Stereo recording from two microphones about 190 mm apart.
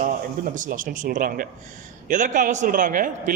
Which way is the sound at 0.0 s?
45° right (ahead or behind).